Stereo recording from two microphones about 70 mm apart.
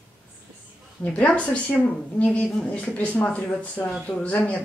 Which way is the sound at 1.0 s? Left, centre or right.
Centre.